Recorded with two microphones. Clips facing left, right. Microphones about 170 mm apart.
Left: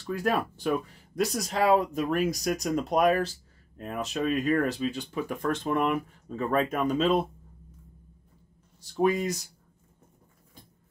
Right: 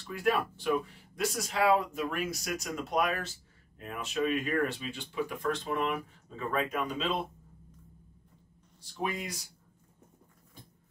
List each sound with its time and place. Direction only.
0.1 s speech: 40° left (ahead or behind)
8.9 s speech: 45° left (ahead or behind)